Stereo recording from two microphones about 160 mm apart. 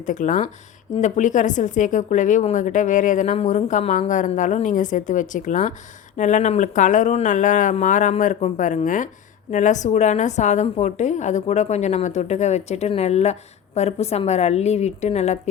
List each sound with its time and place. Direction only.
0.0 s a woman's voice: 50° left (ahead or behind)